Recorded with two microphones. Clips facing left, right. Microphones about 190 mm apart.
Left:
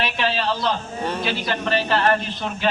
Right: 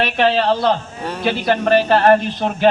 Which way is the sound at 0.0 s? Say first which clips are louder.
Right 7 dB; 60° right (ahead or behind).